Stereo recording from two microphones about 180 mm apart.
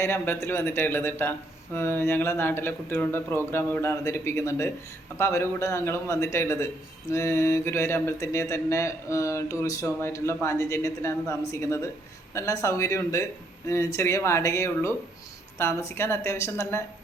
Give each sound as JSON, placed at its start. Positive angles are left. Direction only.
{"t": 0.0, "sound": "speech", "side_deg": 15}